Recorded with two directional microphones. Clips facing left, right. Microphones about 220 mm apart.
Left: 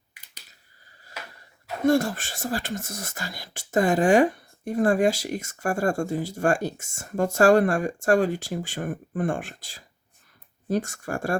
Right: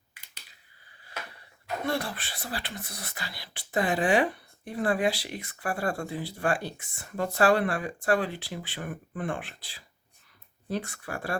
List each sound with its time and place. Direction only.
1.9 s speech: 45° left (ahead or behind)